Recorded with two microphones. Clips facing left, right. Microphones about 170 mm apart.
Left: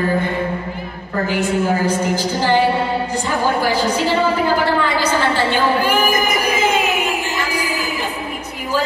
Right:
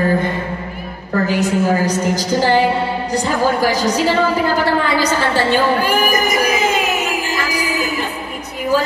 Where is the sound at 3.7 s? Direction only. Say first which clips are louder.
Right 1 dB; 40° right (ahead or behind).